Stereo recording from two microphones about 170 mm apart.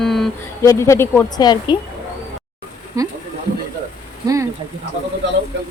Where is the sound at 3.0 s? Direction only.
20° right (ahead or behind).